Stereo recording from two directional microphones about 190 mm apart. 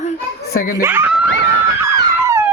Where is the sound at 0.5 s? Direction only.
55° left (ahead or behind).